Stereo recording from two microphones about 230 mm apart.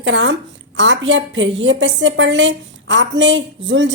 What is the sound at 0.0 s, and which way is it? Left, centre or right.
A woman's voice, right.